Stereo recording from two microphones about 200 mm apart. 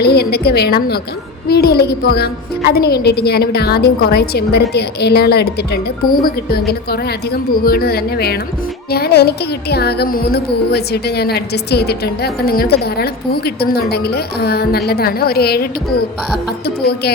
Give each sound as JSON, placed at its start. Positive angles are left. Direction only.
{"t": 0.0, "sound": "a woman's voice", "side_deg": 55}